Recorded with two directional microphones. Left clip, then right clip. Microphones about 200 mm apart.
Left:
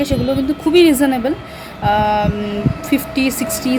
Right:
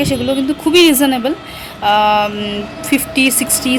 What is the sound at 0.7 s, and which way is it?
Speech, 5° left (ahead or behind).